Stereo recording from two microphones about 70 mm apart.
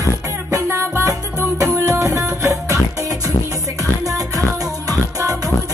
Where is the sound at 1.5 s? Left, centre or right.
Right.